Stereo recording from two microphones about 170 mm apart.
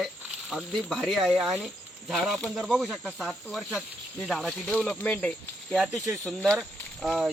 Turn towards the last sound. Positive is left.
turn(degrees=0)  # may be behind; listen again after turning